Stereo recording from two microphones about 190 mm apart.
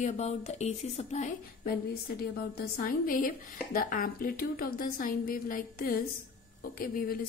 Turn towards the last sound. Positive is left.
turn(degrees=50)  # may be behind; listen again after turning